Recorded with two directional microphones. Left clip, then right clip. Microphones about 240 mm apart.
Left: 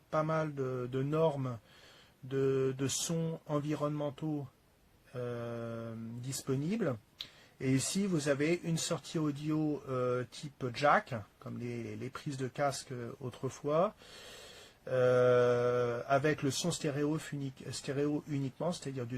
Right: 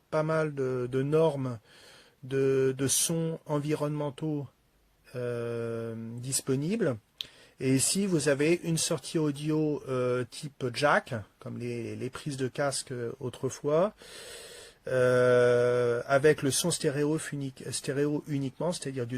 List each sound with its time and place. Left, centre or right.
0.1 s speech: right